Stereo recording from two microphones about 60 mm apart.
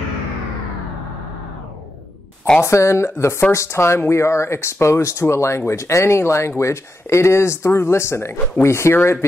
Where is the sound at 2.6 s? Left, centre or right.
Left.